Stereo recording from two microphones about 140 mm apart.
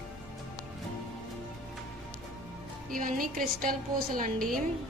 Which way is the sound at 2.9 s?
80° right.